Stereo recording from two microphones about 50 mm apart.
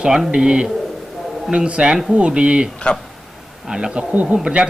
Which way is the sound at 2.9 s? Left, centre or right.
Centre.